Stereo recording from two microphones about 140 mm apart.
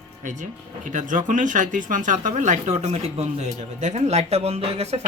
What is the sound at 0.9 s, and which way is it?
Speech, 65° right (ahead or behind).